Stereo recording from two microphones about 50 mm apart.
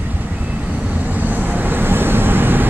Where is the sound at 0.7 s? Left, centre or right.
Right.